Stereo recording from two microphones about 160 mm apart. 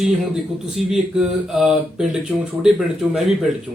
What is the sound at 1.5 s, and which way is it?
Mantra, centre (ahead or behind).